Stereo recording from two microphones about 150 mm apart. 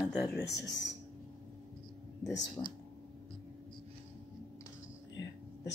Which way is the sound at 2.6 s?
30° left (ahead or behind).